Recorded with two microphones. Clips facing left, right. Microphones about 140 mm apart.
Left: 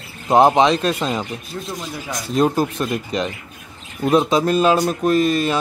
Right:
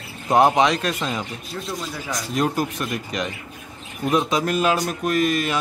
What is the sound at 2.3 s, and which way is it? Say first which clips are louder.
Speech: left 6 dB; 30° left (ahead or behind).